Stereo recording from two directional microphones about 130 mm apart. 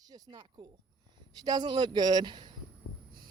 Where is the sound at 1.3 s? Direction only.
30° right (ahead or behind).